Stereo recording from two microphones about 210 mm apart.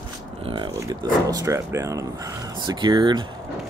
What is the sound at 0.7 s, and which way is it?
Speech, 15° right (ahead or behind).